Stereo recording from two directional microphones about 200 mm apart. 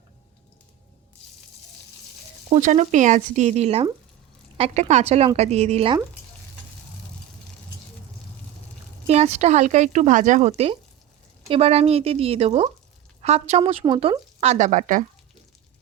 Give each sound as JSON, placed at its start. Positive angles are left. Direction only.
{"t": 2.5, "sound": "speech", "side_deg": -35}
{"t": 9.0, "sound": "speech", "side_deg": -35}